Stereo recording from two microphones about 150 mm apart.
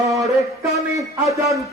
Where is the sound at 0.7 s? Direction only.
20° right (ahead or behind).